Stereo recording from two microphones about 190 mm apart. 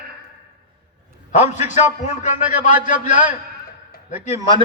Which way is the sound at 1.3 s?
40° left (ahead or behind).